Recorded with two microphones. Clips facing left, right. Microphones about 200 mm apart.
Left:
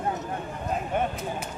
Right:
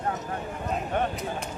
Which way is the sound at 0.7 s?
Centre (ahead or behind).